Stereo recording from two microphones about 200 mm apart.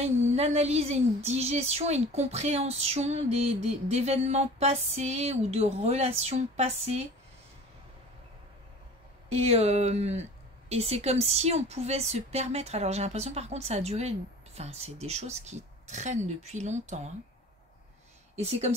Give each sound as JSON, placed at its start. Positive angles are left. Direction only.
{"t": 0.0, "sound": "a woman's voice", "side_deg": -30}
{"t": 9.4, "sound": "a woman's voice", "side_deg": -30}
{"t": 18.3, "sound": "speech", "side_deg": -30}